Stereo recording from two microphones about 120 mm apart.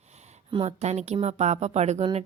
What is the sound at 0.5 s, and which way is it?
Speech, 60° right (ahead or behind).